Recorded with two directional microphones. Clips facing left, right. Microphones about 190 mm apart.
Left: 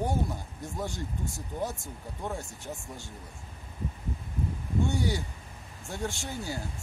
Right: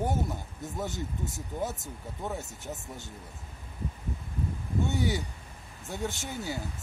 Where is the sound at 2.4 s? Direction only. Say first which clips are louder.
Even; 20° right (ahead or behind).